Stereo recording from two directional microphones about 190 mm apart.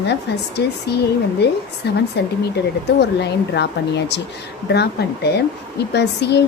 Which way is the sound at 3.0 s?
65° left (ahead or behind).